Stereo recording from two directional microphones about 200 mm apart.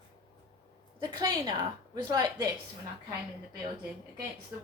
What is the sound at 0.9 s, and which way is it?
A woman's voice, 20° right (ahead or behind).